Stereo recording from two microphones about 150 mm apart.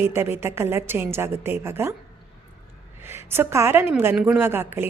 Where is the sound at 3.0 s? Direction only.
15° right (ahead or behind).